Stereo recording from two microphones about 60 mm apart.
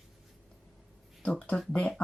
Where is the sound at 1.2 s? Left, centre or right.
Left.